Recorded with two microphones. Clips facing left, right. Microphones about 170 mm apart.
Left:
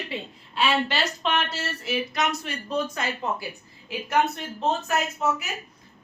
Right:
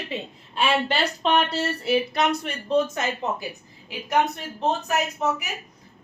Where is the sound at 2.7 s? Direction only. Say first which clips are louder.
Right 6 dB; 25° right (ahead or behind).